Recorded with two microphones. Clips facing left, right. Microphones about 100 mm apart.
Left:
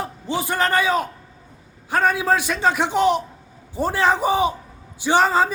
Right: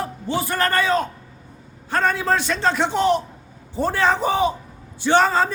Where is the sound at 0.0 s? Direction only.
15° left (ahead or behind).